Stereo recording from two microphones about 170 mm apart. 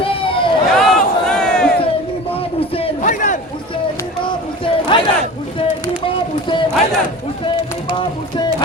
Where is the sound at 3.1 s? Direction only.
50° left (ahead or behind).